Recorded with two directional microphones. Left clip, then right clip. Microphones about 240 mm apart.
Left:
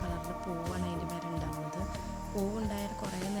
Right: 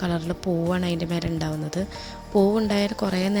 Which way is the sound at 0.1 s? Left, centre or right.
Right.